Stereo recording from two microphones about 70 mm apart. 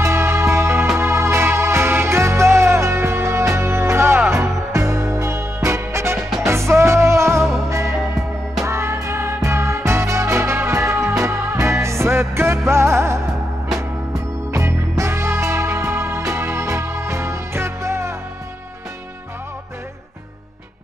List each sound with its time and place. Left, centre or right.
0.0 s music: right
14.6 s music: right